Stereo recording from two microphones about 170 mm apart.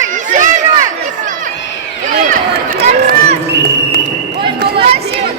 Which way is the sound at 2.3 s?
50° right (ahead or behind).